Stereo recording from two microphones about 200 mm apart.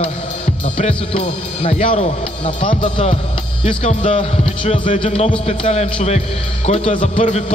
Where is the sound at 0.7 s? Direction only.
30° left (ahead or behind).